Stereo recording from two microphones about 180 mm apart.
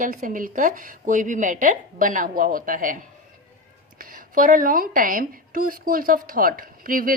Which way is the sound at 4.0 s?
50° right (ahead or behind).